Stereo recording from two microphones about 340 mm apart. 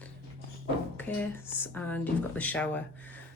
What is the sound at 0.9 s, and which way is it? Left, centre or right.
Speech, centre.